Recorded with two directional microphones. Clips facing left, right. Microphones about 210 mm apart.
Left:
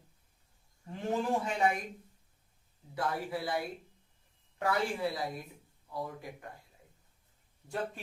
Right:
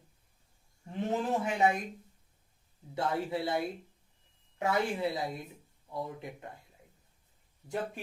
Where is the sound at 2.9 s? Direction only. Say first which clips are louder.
Right 3 dB; 25° right (ahead or behind).